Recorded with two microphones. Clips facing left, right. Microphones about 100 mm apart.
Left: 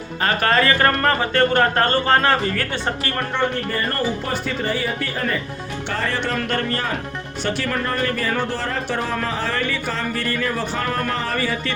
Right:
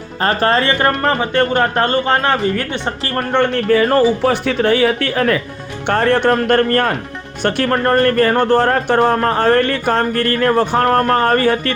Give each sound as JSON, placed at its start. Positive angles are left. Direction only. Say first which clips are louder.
{"t": 0.2, "sound": "speech", "louder": "right 4 dB", "side_deg": -35}
{"t": 3.3, "sound": "speech", "louder": "right 11 dB", "side_deg": -85}
{"t": 5.9, "sound": "a sound", "louder": "right 11 dB", "side_deg": -60}